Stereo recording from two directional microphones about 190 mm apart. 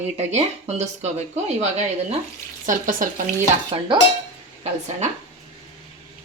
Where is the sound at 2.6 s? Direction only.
45° right (ahead or behind).